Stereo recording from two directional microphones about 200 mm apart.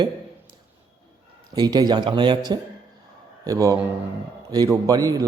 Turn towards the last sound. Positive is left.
turn(degrees=-20)  # may be behind; listen again after turning